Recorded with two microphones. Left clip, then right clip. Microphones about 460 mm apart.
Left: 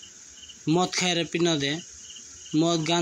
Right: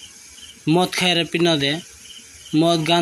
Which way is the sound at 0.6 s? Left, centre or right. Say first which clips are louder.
Right 6 dB; right.